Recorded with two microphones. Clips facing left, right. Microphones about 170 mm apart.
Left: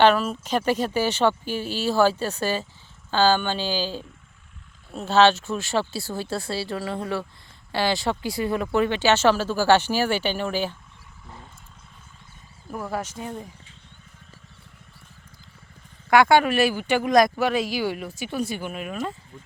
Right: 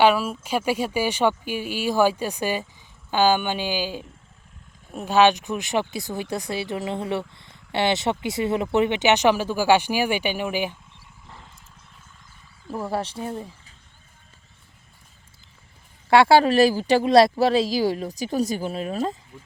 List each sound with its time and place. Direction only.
0.0 s speech: 10° right (ahead or behind)
12.6 s speech: 30° right (ahead or behind)
16.0 s speech: 30° right (ahead or behind)